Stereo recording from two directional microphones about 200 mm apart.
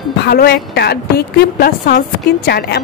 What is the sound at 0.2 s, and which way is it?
Speech, 50° left (ahead or behind).